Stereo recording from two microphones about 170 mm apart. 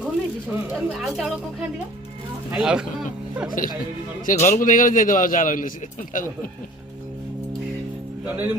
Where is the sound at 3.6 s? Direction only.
50° left (ahead or behind).